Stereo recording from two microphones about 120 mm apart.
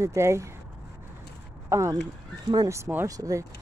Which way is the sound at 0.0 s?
25° right (ahead or behind).